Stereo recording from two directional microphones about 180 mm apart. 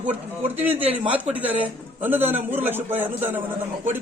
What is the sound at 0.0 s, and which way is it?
Speech, 40° right (ahead or behind).